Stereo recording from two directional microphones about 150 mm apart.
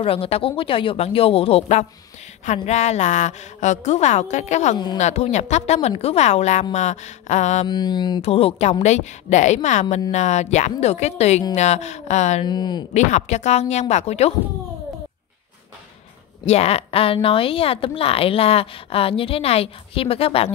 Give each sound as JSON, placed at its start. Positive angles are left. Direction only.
{"t": 0.0, "sound": "a woman's voice", "side_deg": 40}
{"t": 7.6, "sound": "mantra", "side_deg": 30}
{"t": 8.2, "sound": "a woman's voice", "side_deg": 40}
{"t": 12.4, "sound": "mantra", "side_deg": 30}
{"t": 12.9, "sound": "a woman's voice", "side_deg": 50}
{"t": 16.4, "sound": "speech", "side_deg": 45}